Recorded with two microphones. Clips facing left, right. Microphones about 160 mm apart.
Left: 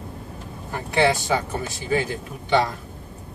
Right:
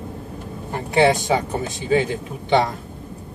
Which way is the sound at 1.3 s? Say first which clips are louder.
Right 3 dB; 25° right (ahead or behind).